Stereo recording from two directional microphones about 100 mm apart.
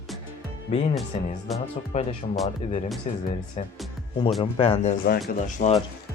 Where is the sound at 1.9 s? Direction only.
90° left.